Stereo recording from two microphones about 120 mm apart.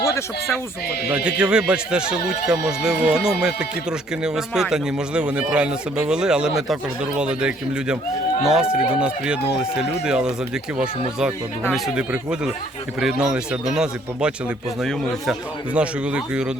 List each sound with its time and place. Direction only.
0.0 s speech: 25° left (ahead or behind)
1.1 s a man's voice: 10° right (ahead or behind)
11.7 s a man's voice: 5° right (ahead or behind)